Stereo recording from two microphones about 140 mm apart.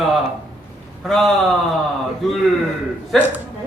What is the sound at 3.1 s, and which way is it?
Speech, centre (ahead or behind).